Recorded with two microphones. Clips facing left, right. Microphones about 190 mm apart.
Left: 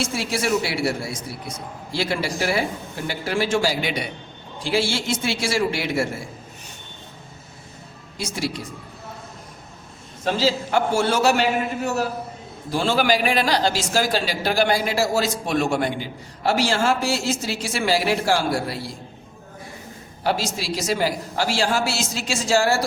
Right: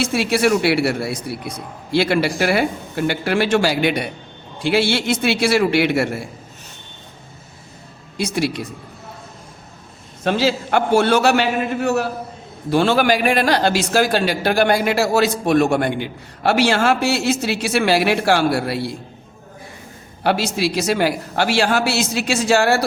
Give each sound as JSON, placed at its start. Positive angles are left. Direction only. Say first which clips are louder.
{"t": 0.0, "sound": "a man's voice", "louder": "right 7 dB", "side_deg": -65}
{"t": 8.2, "sound": "a man's voice", "louder": "right 6 dB", "side_deg": -65}
{"t": 10.2, "sound": "a man's voice", "louder": "right 3 dB", "side_deg": -65}
{"t": 20.2, "sound": "a man's voice", "louder": "right 5 dB", "side_deg": -65}